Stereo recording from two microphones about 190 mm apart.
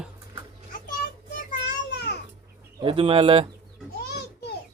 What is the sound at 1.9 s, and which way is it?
Babbling, 60° left (ahead or behind).